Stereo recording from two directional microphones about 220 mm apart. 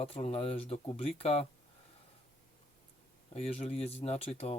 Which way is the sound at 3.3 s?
30° left (ahead or behind).